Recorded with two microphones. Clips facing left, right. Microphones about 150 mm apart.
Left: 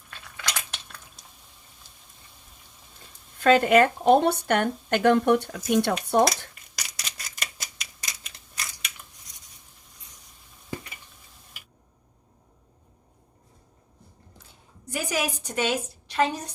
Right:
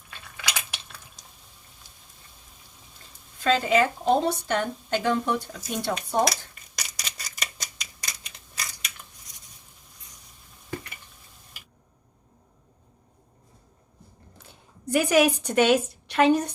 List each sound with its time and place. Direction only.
0.1 s cutlery: 5° right (ahead or behind)
3.4 s speech: 60° left (ahead or behind)
6.5 s scissors: centre (ahead or behind)
14.3 s a sound: 60° right (ahead or behind)